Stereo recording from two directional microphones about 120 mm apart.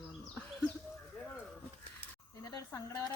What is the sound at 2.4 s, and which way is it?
Speech, 30° left (ahead or behind).